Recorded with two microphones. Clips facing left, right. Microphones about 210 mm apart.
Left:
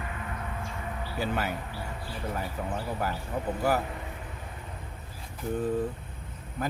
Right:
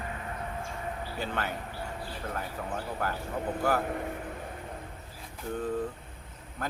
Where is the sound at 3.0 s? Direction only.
5° left (ahead or behind).